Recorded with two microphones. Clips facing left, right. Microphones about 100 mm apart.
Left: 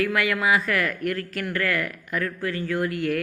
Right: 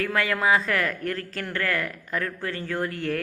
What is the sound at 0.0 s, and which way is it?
A man's voice, 30° right (ahead or behind).